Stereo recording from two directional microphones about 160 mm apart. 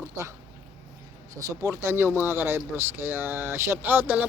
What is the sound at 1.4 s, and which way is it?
Speech, 20° right (ahead or behind).